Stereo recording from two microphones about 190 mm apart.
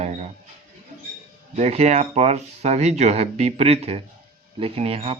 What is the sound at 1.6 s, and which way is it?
A man's voice, 35° right (ahead or behind).